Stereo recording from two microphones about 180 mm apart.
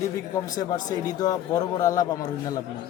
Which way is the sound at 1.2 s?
20° left (ahead or behind).